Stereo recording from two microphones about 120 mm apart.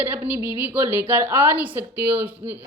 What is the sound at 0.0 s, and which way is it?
A woman's voice, 15° right (ahead or behind).